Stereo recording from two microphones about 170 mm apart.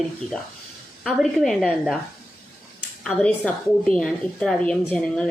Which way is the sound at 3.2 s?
5° left (ahead or behind).